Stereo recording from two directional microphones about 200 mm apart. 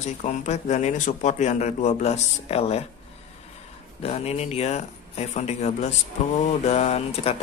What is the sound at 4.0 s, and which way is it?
A man's voice, 30° left (ahead or behind).